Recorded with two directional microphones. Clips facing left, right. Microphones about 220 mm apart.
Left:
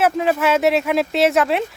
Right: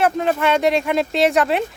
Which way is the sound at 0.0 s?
5° left (ahead or behind).